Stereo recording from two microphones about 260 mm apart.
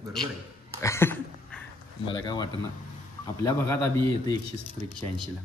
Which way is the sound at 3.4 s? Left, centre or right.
Centre.